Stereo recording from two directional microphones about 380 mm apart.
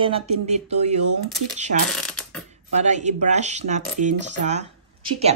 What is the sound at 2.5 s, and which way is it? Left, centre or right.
Speech, centre.